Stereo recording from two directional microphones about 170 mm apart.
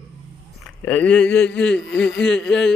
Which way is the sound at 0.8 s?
5° left (ahead or behind).